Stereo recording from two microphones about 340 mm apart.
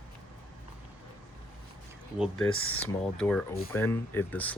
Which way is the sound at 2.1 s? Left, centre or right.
Centre.